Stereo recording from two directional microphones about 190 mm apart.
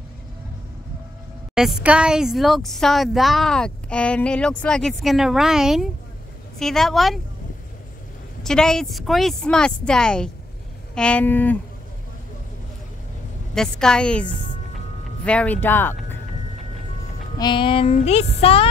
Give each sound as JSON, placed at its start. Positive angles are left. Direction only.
{"t": 1.5, "sound": "a woman's voice", "side_deg": -5}
{"t": 8.4, "sound": "a woman's voice", "side_deg": 5}
{"t": 13.6, "sound": "a woman's voice", "side_deg": 5}
{"t": 17.4, "sound": "a sound", "side_deg": 25}